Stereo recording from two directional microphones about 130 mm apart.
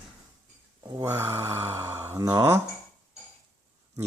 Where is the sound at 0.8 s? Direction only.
25° right (ahead or behind).